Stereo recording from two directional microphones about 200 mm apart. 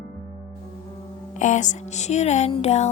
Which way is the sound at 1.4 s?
40° left (ahead or behind).